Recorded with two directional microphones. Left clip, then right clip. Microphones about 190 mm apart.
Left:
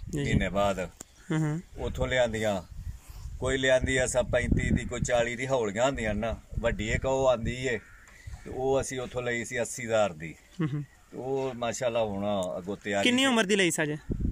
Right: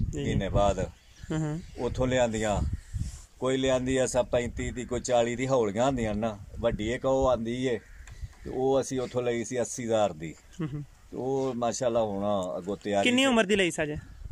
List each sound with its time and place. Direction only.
0.1 s speech: 5° right (ahead or behind)